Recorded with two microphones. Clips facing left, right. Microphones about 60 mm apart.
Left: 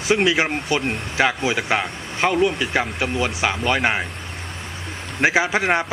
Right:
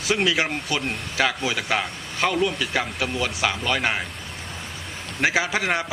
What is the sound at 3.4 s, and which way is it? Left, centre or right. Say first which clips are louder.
Speech: left 3 dB; centre.